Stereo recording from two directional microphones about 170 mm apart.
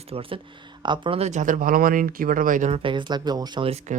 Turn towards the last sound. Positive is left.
turn(degrees=-30)  # may be behind; listen again after turning